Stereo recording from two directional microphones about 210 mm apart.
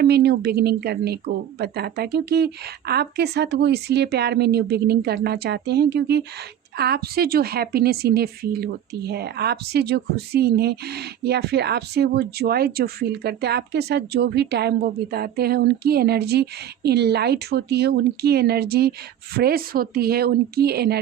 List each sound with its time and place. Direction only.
0.0 s a woman's voice: 50° right (ahead or behind)